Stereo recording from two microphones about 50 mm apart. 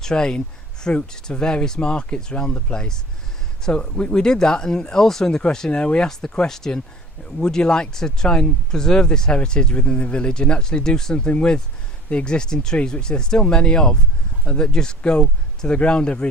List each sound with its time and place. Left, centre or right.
0.0 s speech: centre